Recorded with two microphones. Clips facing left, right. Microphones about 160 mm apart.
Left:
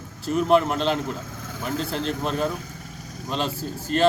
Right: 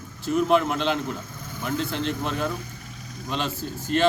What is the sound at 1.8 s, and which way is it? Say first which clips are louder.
Speech: even; 35° left (ahead or behind).